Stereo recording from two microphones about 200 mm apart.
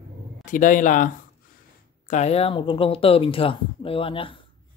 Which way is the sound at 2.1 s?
35° left (ahead or behind).